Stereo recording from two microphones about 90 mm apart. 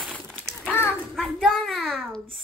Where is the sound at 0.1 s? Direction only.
10° left (ahead or behind).